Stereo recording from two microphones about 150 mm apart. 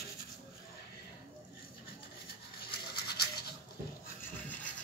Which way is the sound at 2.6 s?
90° left.